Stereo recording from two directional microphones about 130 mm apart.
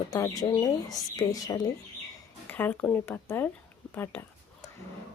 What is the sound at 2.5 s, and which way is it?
Speech, 15° left (ahead or behind).